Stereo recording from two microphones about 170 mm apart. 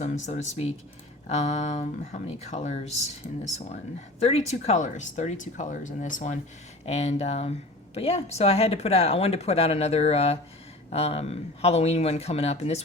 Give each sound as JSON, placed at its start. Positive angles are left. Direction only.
{"t": 0.0, "sound": "speech", "side_deg": 40}
{"t": 4.2, "sound": "speech", "side_deg": 35}